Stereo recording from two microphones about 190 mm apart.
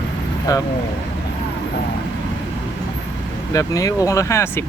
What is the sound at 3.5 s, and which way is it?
Speech, 15° left (ahead or behind).